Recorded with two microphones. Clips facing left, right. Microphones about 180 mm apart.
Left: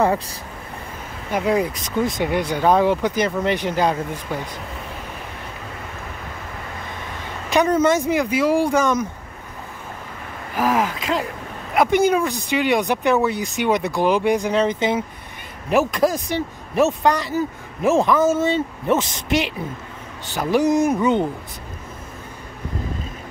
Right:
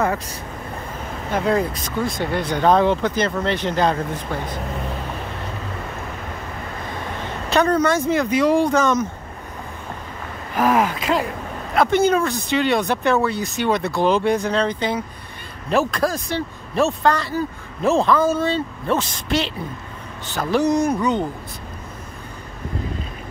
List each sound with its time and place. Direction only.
1.3 s speech: 10° left (ahead or behind)
7.4 s speech: 15° left (ahead or behind)
10.6 s speech: 55° right (ahead or behind)
11.7 s speech: 15° left (ahead or behind)